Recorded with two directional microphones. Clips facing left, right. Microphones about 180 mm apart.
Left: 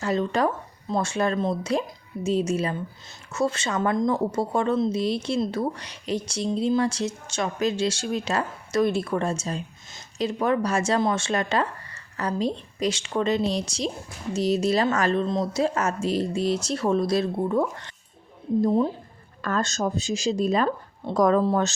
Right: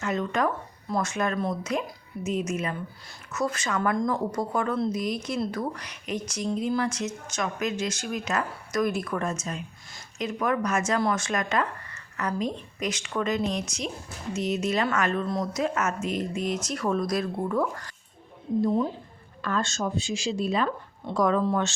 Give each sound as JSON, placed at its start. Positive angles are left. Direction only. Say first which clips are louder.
{"t": 0.0, "sound": "a woman's voice", "louder": "left 3 dB", "side_deg": 30}
{"t": 19.4, "sound": "a woman's voice", "louder": "left 3 dB", "side_deg": 45}